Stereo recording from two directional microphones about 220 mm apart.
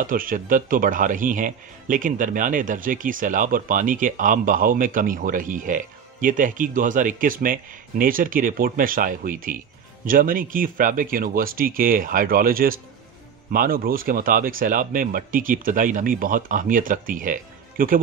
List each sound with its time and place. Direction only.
0.0 s speech: 40° right (ahead or behind)